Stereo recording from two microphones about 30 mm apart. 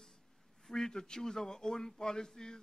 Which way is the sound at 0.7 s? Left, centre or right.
Left.